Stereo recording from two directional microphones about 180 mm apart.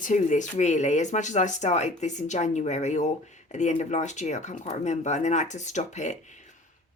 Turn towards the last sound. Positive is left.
turn(degrees=40)  # may be behind; listen again after turning